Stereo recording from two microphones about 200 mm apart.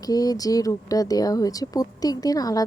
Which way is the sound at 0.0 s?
20° left (ahead or behind).